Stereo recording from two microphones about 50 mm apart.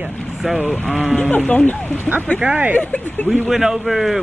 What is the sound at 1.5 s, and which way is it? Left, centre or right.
Speech, left.